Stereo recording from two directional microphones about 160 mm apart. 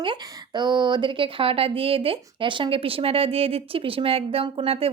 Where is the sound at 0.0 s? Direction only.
30° right (ahead or behind).